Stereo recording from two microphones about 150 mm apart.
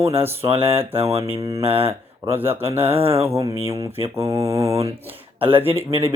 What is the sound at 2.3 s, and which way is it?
Speech, 15° right (ahead or behind).